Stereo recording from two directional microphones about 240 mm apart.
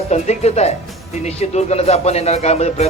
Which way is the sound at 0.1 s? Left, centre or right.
Left.